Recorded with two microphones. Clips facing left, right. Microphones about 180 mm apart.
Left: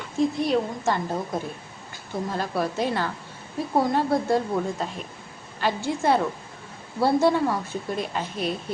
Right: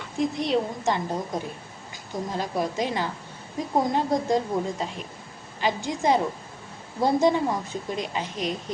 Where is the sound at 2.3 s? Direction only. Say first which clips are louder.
Left 1 dB; 15° right (ahead or behind).